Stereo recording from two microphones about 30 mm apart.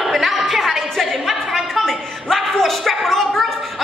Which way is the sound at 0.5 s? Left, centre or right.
Centre.